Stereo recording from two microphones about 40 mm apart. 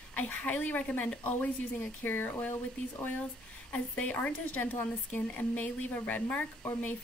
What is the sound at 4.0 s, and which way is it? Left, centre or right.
Speech, left.